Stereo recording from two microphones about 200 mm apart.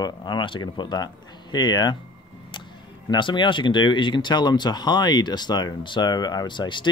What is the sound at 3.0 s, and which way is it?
Speech, 25° left (ahead or behind).